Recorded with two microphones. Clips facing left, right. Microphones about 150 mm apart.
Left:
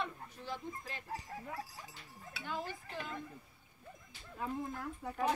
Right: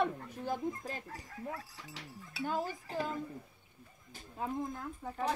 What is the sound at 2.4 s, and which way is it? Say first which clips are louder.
Speech: right 6 dB; 40° right (ahead or behind).